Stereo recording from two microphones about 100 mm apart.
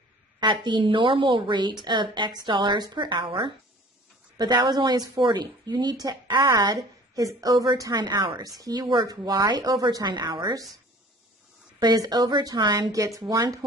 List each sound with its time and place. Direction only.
0.4 s a woman's voice: 50° right (ahead or behind)
11.8 s a woman's voice: 40° right (ahead or behind)